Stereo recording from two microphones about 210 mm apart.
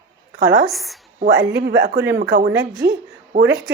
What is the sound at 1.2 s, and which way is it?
Speech, 60° right (ahead or behind).